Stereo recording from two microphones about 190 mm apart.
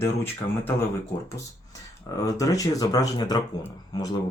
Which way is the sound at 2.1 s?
20° left (ahead or behind).